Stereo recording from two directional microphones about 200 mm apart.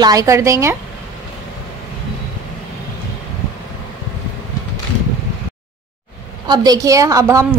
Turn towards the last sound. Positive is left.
turn(degrees=-15)  # may be behind; listen again after turning